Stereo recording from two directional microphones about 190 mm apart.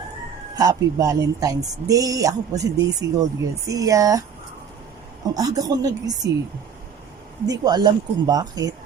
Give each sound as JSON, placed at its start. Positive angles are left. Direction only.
{"t": 0.5, "sound": "speech", "side_deg": -20}
{"t": 5.3, "sound": "speech", "side_deg": -20}
{"t": 7.4, "sound": "speech", "side_deg": -20}